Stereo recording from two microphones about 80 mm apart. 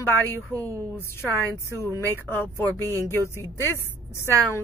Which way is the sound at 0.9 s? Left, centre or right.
Left.